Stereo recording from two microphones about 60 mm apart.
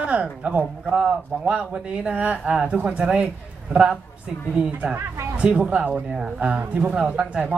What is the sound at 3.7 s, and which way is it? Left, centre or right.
Speech, centre.